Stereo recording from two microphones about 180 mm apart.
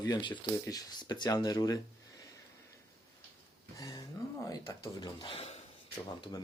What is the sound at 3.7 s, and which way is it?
Speech, 20° left (ahead or behind).